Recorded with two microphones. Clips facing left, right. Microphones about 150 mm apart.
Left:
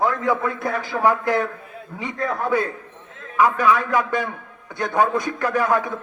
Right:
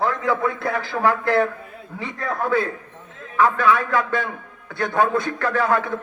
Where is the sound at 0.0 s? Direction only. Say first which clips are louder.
Left 1 dB; 15° left (ahead or behind).